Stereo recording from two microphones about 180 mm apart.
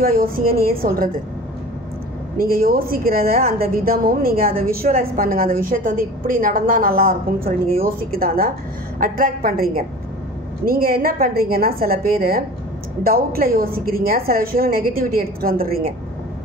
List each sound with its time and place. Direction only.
0.0 s a woman's voice: 55° right (ahead or behind)
2.3 s a woman's voice: 55° right (ahead or behind)